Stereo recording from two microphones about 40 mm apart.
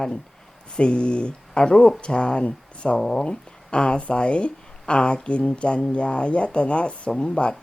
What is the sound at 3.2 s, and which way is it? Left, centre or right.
Speech, left.